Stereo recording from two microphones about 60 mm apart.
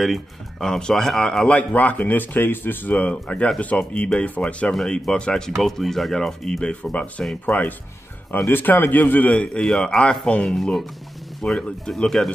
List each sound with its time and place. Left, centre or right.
0.0 s a man's voice: centre
4.7 s speech: centre
6.7 s a man's voice: left
9.6 s speech: centre